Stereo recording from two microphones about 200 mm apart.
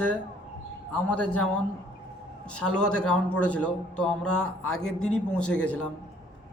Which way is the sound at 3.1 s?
5° left (ahead or behind).